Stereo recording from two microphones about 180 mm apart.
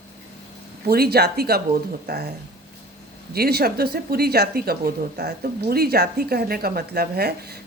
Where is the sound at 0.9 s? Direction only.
60° right (ahead or behind).